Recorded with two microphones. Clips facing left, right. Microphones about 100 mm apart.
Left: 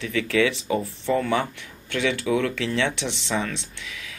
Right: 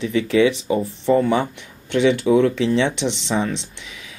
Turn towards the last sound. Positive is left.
turn(degrees=-20)  # may be behind; listen again after turning